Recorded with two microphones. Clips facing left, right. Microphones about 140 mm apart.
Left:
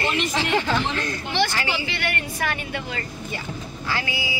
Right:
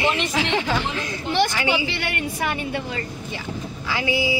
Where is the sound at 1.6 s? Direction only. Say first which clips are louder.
Right 4 dB; 20° right (ahead or behind).